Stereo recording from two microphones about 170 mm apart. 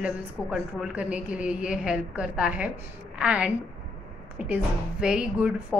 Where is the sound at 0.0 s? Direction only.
5° right (ahead or behind).